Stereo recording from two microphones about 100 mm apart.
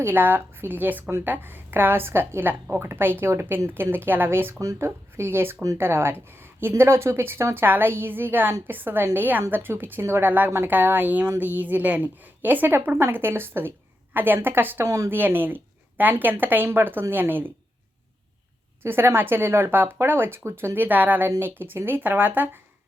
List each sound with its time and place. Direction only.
0.0 s speech: 20° right (ahead or behind)
4.6 s speech: 35° right (ahead or behind)
14.8 s speech: 30° right (ahead or behind)
15.1 s a woman's voice: 20° right (ahead or behind)
18.8 s speech: 20° right (ahead or behind)